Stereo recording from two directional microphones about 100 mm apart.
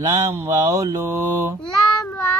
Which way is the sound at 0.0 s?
35° right (ahead or behind).